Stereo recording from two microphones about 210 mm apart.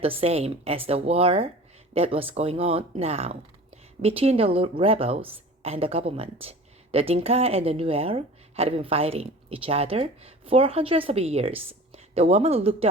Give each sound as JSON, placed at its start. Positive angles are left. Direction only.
{"t": 0.0, "sound": "speech", "side_deg": -30}